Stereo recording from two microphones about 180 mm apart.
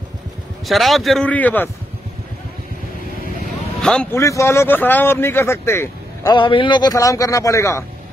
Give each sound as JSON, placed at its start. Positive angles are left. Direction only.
{"t": 0.7, "sound": "a man's voice", "side_deg": 0}
{"t": 3.8, "sound": "a man's voice", "side_deg": 5}
{"t": 4.1, "sound": "speech", "side_deg": 15}
{"t": 6.3, "sound": "a man's voice", "side_deg": 25}